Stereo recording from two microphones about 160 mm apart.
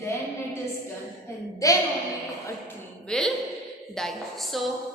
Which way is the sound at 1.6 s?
20° left (ahead or behind).